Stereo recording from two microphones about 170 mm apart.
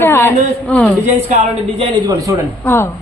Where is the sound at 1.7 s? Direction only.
25° right (ahead or behind).